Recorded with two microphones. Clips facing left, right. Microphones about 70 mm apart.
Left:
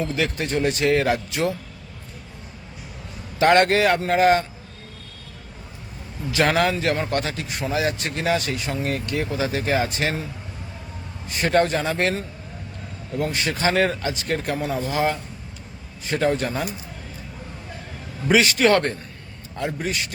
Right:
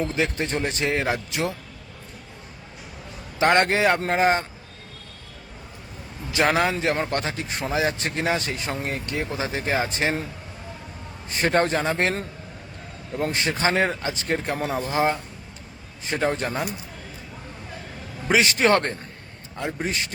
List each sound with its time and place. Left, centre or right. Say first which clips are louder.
0.1 s a man's voice: left 1 dB; right
3.3 s a man's voice: left 3 dB; right
6.3 s a man's voice: left 1 dB; right
11.3 s speech: left 2 dB; right
13.1 s a man's voice: even; right
18.3 s a man's voice: left 2 dB; right